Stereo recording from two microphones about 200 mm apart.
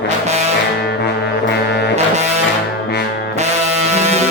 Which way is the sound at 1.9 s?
35° right (ahead or behind).